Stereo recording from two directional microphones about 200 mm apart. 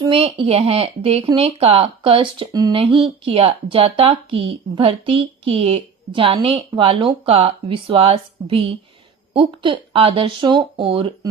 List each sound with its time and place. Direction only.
0.0 s speech: 25° right (ahead or behind)